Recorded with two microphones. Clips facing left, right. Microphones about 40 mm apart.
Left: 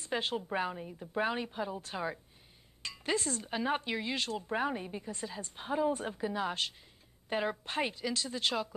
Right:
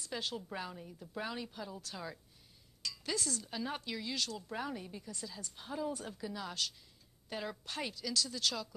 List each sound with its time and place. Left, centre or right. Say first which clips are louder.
0.0 s speech: left 6 dB; left